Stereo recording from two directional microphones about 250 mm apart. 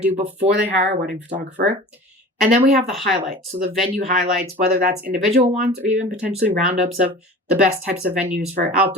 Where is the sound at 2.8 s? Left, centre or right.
Centre.